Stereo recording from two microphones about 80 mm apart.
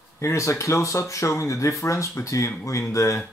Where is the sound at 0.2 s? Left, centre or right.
Left.